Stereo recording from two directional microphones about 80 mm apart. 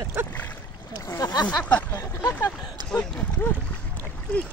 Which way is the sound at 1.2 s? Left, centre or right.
Left.